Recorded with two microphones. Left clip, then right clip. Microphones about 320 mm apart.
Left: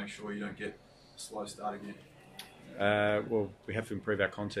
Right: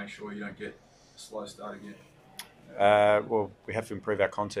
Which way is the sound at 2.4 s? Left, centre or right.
Centre.